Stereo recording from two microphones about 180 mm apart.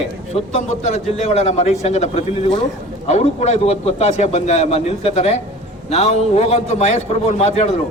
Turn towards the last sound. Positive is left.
turn(degrees=35)  # may be behind; listen again after turning